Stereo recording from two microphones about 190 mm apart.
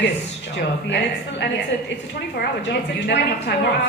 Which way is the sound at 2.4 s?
60° left (ahead or behind).